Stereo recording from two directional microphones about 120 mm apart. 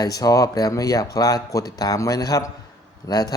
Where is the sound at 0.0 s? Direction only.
30° left (ahead or behind).